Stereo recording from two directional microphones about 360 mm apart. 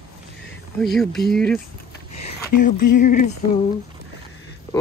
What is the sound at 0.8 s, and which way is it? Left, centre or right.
Speech, centre.